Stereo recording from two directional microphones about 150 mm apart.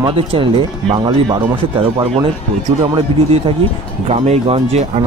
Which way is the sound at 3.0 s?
40° right (ahead or behind).